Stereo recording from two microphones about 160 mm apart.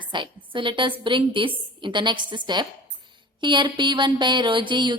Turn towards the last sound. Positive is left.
turn(degrees=-30)  # may be behind; listen again after turning